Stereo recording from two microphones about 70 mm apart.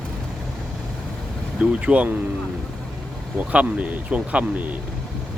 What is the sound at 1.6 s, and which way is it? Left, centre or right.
Speech, centre.